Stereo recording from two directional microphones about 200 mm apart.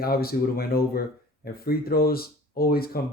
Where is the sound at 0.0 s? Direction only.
50° left (ahead or behind).